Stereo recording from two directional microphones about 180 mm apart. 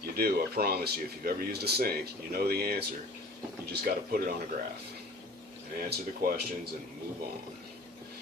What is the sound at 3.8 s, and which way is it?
Speech, 55° right (ahead or behind).